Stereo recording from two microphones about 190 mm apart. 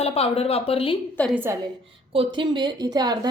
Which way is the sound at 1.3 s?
15° right (ahead or behind).